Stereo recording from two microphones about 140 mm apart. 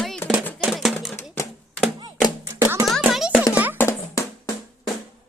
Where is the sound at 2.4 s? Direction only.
20° right (ahead or behind).